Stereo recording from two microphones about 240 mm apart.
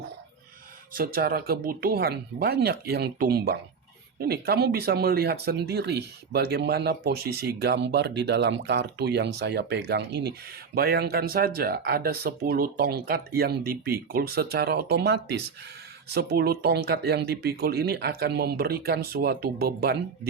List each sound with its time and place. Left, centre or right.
0.9 s speech: right